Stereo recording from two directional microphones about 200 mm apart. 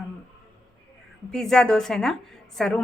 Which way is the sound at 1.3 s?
5° left (ahead or behind).